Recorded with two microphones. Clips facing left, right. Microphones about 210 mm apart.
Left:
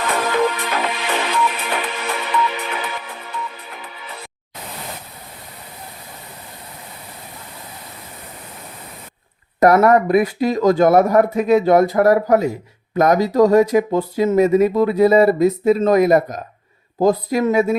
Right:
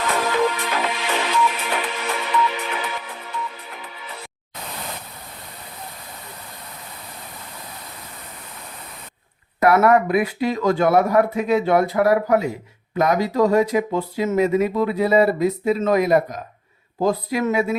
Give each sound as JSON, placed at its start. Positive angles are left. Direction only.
{"t": 0.0, "sound": "music", "side_deg": 55}
{"t": 9.6, "sound": "speech", "side_deg": 40}